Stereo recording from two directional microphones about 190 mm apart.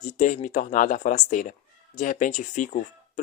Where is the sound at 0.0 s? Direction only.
40° left (ahead or behind).